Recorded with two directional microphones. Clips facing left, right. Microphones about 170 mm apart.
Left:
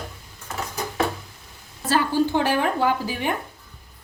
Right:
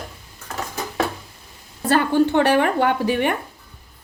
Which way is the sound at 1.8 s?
60° right (ahead or behind).